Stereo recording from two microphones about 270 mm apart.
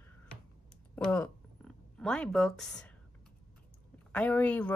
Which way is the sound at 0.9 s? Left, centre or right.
Centre.